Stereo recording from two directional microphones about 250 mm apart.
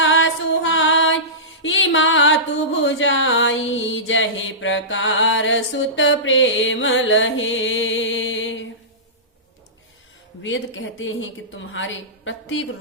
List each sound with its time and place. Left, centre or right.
0.0 s music: left
10.4 s a woman's voice: left